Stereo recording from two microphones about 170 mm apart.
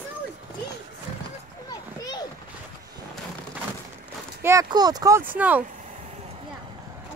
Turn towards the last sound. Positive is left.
turn(degrees=-10)  # may be behind; listen again after turning